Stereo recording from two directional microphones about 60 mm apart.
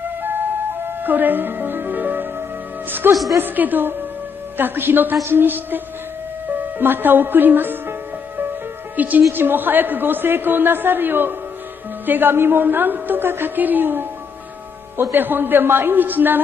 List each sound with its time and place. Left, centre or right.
0.8 s a man's voice: right
6.8 s a man's voice: right
8.9 s a man's voice: right